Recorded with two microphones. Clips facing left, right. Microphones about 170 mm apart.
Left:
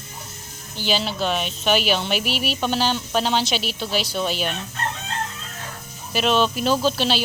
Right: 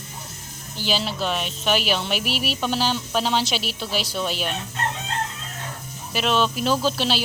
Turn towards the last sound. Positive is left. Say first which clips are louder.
# left 2 dB
turn(degrees=0)  # may be behind; listen again after turning